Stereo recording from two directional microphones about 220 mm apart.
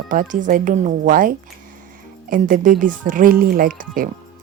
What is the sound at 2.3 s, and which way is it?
Speech, 35° right (ahead or behind).